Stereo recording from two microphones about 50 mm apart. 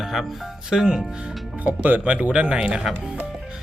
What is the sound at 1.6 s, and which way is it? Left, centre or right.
Speech, right.